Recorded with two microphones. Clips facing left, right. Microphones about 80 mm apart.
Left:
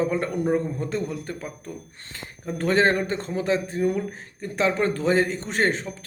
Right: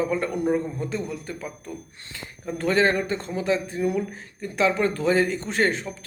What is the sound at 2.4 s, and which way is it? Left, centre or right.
A man's voice, left.